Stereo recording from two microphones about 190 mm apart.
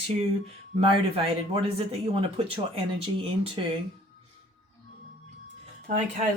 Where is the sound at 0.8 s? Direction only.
30° right (ahead or behind).